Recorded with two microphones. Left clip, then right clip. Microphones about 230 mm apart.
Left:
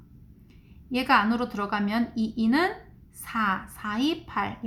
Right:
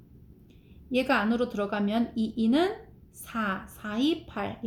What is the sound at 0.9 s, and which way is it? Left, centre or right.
A woman's voice, left.